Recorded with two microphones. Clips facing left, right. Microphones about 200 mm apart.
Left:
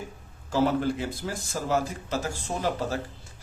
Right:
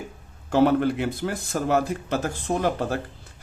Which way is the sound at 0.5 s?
60° right (ahead or behind).